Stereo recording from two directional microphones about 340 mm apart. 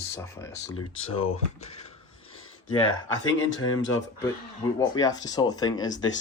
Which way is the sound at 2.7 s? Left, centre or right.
Centre.